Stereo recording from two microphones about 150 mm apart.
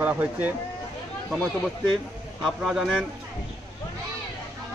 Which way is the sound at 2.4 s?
Centre (ahead or behind).